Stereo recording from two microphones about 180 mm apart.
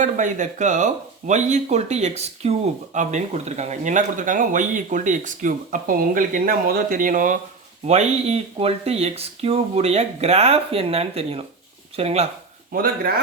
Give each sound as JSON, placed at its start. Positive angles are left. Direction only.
{"t": 0.0, "sound": "speech", "side_deg": -45}
{"t": 12.7, "sound": "speech", "side_deg": -55}